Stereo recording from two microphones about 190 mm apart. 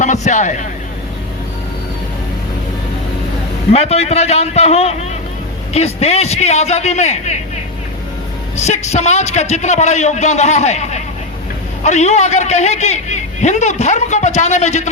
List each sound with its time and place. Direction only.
0.0 s a man's voice: 40° left (ahead or behind)
3.7 s a man's voice: 35° left (ahead or behind)
8.5 s a man's voice: 35° left (ahead or behind)